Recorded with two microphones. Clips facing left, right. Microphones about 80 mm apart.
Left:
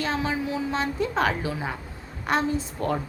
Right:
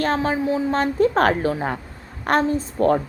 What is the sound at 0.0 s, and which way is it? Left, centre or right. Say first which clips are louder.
A woman's voice: right 6 dB; right.